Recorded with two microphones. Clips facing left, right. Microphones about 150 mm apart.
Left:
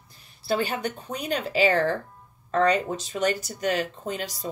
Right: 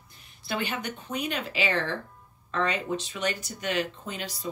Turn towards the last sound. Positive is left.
turn(degrees=40)  # may be behind; listen again after turning